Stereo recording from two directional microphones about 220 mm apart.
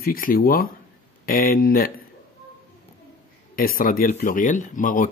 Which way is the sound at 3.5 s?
40° left (ahead or behind).